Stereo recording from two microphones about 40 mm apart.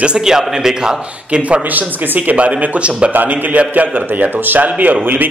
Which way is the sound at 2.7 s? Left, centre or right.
Right.